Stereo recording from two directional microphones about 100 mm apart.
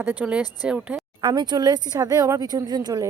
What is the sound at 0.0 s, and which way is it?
Speech, 15° right (ahead or behind).